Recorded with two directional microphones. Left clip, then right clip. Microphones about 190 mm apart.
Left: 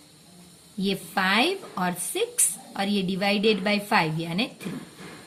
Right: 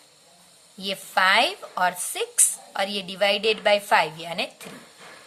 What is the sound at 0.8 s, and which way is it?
Speech, 40° right (ahead or behind).